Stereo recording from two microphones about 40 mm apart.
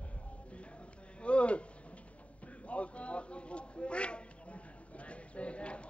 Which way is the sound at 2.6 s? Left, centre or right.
Left.